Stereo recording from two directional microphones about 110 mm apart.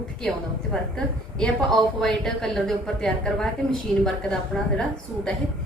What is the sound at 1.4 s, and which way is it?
A woman's voice, 5° left (ahead or behind).